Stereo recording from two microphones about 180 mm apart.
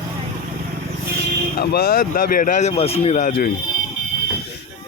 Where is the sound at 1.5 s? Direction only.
60° left (ahead or behind).